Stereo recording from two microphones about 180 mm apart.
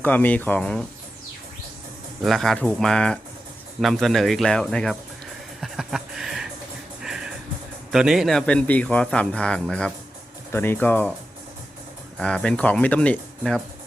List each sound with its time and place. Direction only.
0.0 s speech: 10° left (ahead or behind)
2.2 s speech: centre (ahead or behind)
5.5 s music: centre (ahead or behind)
7.9 s speech: 5° right (ahead or behind)
12.2 s speech: 5° left (ahead or behind)